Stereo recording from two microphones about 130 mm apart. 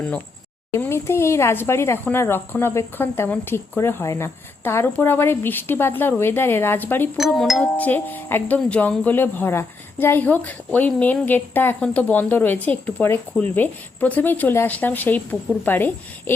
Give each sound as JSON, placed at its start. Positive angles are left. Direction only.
{"t": 0.8, "sound": "speech", "side_deg": 20}
{"t": 7.2, "sound": "a sound", "side_deg": 0}
{"t": 7.8, "sound": "speech", "side_deg": 15}